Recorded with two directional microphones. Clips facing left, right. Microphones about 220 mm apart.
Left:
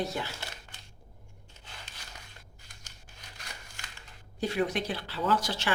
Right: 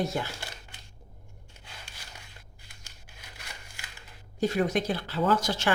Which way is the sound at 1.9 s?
10° right (ahead or behind).